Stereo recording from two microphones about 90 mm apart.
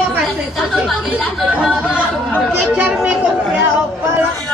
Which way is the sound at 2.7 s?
15° right (ahead or behind).